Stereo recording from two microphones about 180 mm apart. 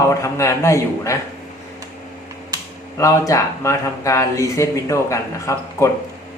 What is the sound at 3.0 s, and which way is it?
Speech, 15° left (ahead or behind).